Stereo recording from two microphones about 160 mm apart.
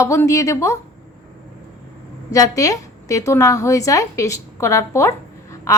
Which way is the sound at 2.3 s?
20° left (ahead or behind).